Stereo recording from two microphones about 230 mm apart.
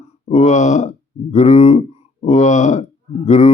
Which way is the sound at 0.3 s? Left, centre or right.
Left.